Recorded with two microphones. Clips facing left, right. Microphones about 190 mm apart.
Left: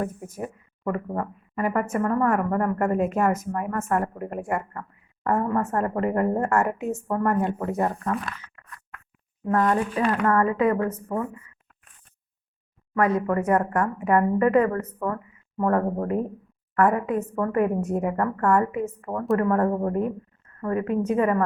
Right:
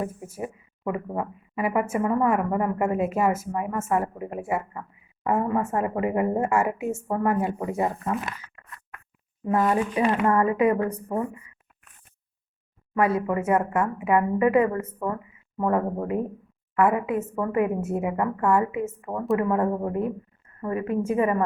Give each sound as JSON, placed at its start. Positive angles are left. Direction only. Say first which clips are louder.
{"t": 0.0, "sound": "speech", "louder": "left 1 dB", "side_deg": -5}
{"t": 8.1, "sound": "a sound", "louder": "even", "side_deg": -20}
{"t": 9.5, "sound": "speech", "louder": "even", "side_deg": -10}
{"t": 12.9, "sound": "a woman's voice", "louder": "left 1 dB", "side_deg": -10}
{"t": 19.5, "sound": "speech", "louder": "left 2 dB", "side_deg": -10}